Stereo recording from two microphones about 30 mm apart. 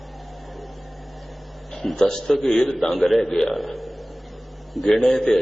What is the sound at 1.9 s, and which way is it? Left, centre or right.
A man's voice, centre.